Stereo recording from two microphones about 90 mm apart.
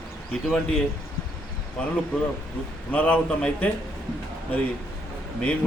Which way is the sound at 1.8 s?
10° left (ahead or behind).